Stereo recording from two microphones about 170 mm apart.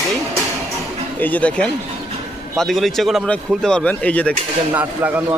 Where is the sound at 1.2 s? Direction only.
10° left (ahead or behind).